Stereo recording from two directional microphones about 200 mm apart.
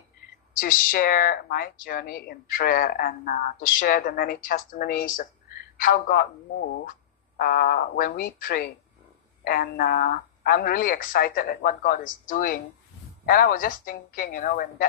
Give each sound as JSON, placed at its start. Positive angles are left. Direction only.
{"t": 0.6, "sound": "speech", "side_deg": 45}
{"t": 7.3, "sound": "speech", "side_deg": 50}